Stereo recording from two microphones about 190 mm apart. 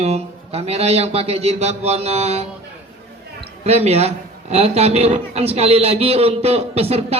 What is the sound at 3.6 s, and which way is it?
A man's voice, 35° right (ahead or behind).